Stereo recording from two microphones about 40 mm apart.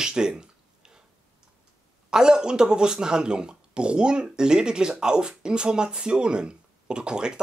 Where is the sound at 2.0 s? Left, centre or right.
Centre.